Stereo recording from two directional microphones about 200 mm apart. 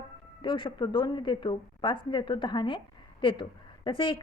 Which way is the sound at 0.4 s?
25° left (ahead or behind).